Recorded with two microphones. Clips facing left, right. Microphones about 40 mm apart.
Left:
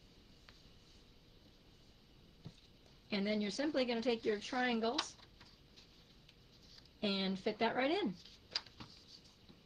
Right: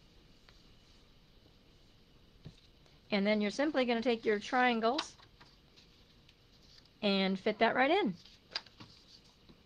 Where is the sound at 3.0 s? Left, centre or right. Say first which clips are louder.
Right 6 dB; right.